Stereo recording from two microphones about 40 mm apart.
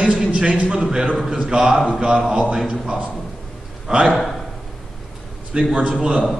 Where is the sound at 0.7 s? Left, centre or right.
Centre.